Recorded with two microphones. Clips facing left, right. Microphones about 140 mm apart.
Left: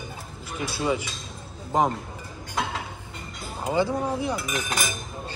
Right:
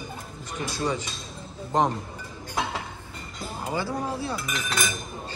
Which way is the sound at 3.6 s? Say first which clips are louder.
Left 5 dB; 20° left (ahead or behind).